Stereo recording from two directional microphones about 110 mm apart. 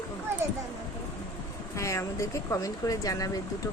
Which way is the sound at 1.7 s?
30° left (ahead or behind).